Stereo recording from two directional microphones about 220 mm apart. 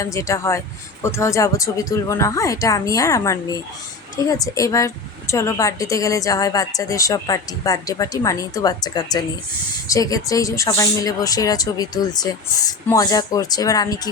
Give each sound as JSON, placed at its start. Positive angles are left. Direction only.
{"t": 0.0, "sound": "speech", "side_deg": 15}